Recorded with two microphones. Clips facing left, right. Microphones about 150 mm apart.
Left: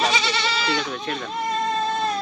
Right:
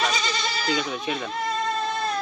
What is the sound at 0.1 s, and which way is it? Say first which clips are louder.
Goat: left 3 dB; 85° left.